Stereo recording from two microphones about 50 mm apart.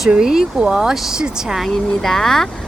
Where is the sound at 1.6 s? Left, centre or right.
Centre.